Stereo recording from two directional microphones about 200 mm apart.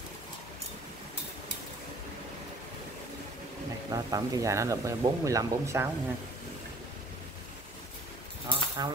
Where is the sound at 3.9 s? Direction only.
15° right (ahead or behind).